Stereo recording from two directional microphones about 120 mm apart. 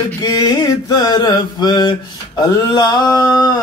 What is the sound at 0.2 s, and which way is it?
Mantra, 35° left (ahead or behind).